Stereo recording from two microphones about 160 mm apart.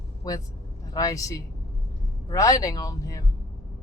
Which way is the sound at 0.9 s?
20° left (ahead or behind).